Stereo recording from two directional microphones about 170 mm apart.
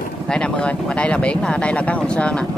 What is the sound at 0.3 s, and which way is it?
Speech, 5° left (ahead or behind).